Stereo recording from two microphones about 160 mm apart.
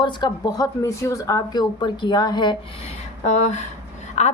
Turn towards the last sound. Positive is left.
turn(degrees=45)  # may be behind; listen again after turning